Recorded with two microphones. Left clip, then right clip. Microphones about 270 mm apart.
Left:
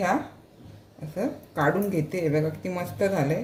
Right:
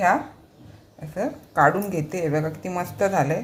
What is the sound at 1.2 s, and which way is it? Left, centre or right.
A woman's voice, centre.